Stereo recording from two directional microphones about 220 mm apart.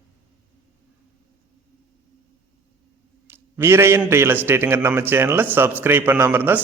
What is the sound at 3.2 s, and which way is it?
A man's voice, 10° right (ahead or behind).